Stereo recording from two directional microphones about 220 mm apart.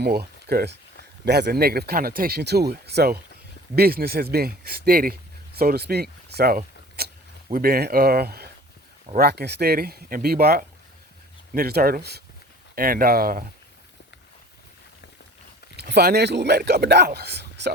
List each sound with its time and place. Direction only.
0.0 s speech: 45° right (ahead or behind)
7.0 s a sound: 45° right (ahead or behind)
7.5 s speech: 45° right (ahead or behind)
15.7 s speech: 50° right (ahead or behind)